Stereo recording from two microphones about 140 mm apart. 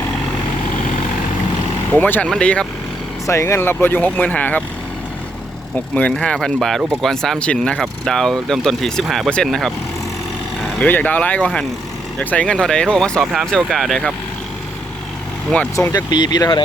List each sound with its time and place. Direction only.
1.9 s speech: 15° left (ahead or behind)
3.2 s speech: 20° left (ahead or behind)
5.9 s speech: 10° left (ahead or behind)
10.8 s speech: 10° left (ahead or behind)
15.7 s speech: 25° left (ahead or behind)